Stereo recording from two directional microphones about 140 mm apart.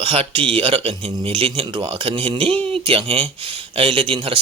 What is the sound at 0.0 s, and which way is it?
Speech, 40° right (ahead or behind).